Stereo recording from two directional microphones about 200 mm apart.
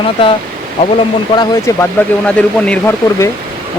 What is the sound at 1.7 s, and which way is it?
Speech, 15° left (ahead or behind).